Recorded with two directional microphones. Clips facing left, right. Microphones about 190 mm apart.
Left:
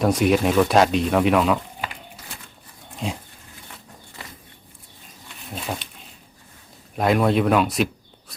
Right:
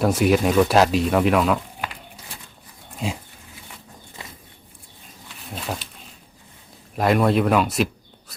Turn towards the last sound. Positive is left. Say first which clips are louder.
# even
turn(degrees=0)  # may be behind; listen again after turning